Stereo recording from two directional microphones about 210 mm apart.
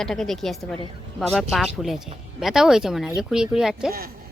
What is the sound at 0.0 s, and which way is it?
Speech, centre (ahead or behind).